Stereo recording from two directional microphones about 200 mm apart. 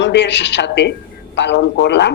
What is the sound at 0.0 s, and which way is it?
Speech, 60° left (ahead or behind).